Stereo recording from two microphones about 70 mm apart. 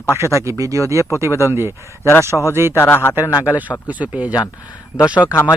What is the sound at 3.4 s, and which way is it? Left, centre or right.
Speech, right.